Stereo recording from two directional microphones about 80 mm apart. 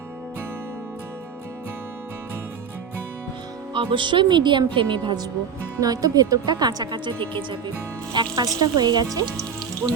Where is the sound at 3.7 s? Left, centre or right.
Right.